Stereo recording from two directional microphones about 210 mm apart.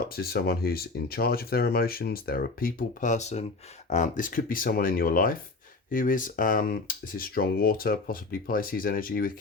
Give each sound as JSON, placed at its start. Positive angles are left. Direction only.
{"t": 0.1, "sound": "speech", "side_deg": 45}